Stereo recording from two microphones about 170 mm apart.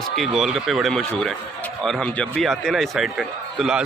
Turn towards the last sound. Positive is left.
turn(degrees=0)  # may be behind; listen again after turning